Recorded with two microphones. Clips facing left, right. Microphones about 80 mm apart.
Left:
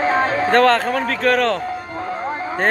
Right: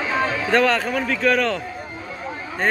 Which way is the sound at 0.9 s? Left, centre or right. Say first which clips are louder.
Left 2 dB; left.